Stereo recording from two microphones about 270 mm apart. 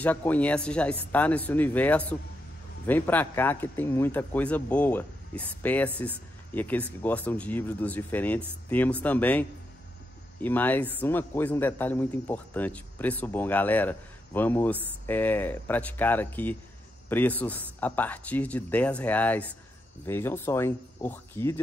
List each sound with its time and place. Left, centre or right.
0.0 s a man's voice: centre